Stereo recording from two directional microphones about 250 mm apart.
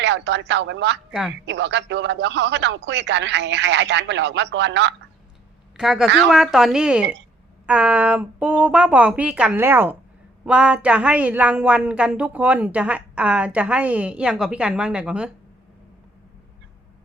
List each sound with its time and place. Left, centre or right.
0.0 s a man's voice: right
5.7 s a woman's voice: centre